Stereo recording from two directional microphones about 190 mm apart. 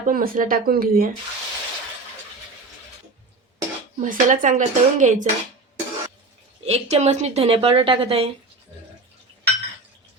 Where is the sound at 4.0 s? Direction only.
40° right (ahead or behind).